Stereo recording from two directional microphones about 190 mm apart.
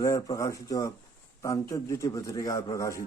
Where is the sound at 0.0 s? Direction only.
20° left (ahead or behind).